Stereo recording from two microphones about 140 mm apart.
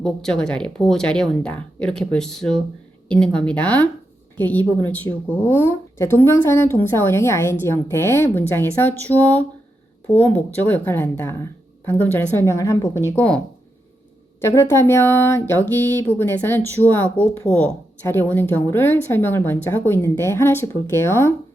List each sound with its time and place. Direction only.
0.0 s speech: 5° left (ahead or behind); by 13.0 s 25° left (ahead or behind)
13.1 s speech: 10° left (ahead or behind)
14.4 s speech: 20° left (ahead or behind)